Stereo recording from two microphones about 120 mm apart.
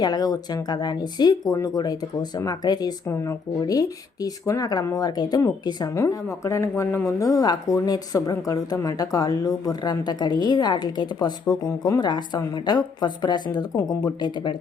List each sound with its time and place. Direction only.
0.0 s speech: 35° left (ahead or behind)